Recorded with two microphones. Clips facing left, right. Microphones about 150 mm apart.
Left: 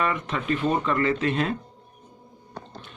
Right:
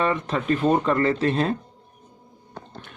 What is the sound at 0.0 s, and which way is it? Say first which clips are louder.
Speech: right 3 dB; 35° right (ahead or behind).